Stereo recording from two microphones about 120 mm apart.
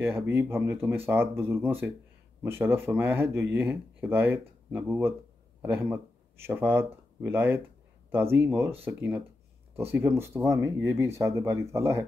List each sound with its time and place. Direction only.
0.0 s speech: 20° right (ahead or behind)